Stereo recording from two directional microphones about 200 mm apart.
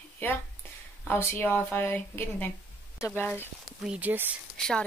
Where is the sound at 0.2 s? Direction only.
10° left (ahead or behind).